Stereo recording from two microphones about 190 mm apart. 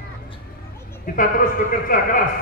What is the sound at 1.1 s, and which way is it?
A man's voice, 45° left (ahead or behind).